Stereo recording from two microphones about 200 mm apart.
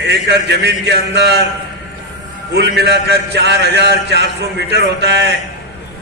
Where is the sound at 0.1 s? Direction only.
55° right (ahead or behind).